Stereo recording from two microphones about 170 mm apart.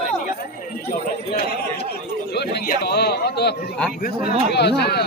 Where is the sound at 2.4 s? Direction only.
75° left (ahead or behind).